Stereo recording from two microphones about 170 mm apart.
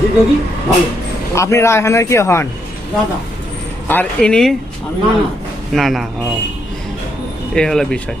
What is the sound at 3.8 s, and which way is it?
Speech, 10° left (ahead or behind).